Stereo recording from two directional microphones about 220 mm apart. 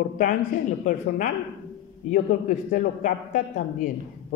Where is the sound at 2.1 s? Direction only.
35° left (ahead or behind).